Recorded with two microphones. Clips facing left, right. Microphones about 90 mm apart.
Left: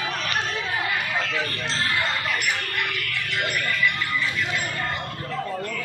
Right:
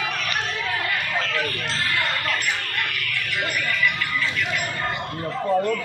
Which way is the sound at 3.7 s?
15° left (ahead or behind).